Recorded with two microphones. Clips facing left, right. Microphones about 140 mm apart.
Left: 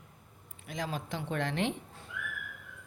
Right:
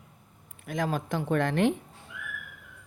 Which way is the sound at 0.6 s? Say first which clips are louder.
Right 7 dB; 50° right (ahead or behind).